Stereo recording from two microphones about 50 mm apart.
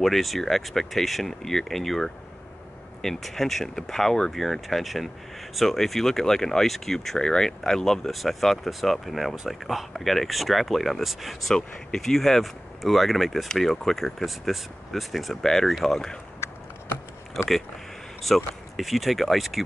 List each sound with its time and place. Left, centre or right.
0.0 s speech: centre
11.5 s speech: centre
16.4 s a sound: left
17.4 s speech: centre